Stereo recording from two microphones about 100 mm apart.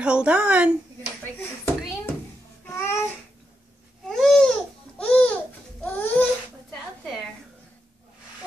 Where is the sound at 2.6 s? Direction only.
25° left (ahead or behind).